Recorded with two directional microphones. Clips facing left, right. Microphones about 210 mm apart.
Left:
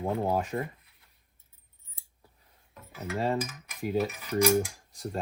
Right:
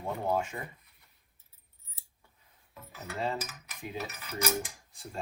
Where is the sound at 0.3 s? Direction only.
35° left (ahead or behind).